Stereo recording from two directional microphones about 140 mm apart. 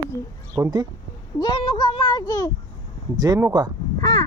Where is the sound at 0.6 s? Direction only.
10° right (ahead or behind).